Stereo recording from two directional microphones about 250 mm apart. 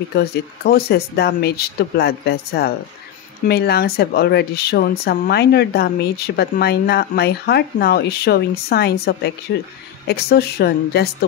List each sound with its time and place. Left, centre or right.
0.1 s a woman's voice: left